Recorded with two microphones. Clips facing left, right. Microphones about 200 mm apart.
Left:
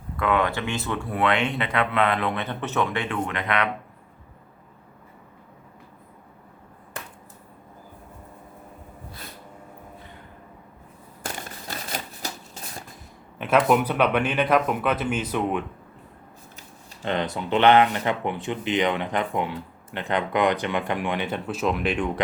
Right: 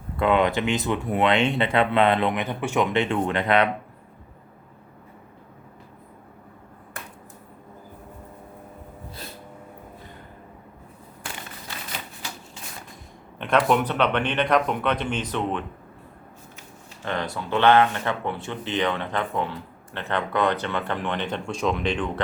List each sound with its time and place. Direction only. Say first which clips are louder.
0.2 s speech: right 3 dB; 20° right (ahead or behind)
2.4 s speech: right 2 dB; 10° right (ahead or behind); by 3.7 s 30° right (ahead or behind)
11.2 s shuffling cards: left 4 dB; 45° left (ahead or behind)
13.4 s speech: left 1 dB; 5° left (ahead or behind)
17.0 s speech: left 2 dB; 20° left (ahead or behind)